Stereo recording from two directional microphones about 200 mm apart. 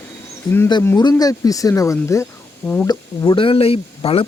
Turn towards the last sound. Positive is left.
turn(degrees=30)  # may be behind; listen again after turning